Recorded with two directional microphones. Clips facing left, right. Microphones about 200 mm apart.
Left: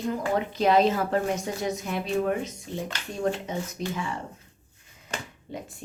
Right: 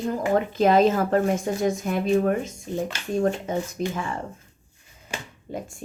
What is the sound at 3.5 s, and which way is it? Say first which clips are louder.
Speech: right 5 dB; 50° right (ahead or behind).